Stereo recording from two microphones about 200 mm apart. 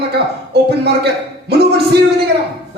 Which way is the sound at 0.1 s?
55° right (ahead or behind).